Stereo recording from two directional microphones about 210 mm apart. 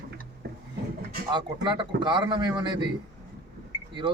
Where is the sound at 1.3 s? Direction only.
20° right (ahead or behind).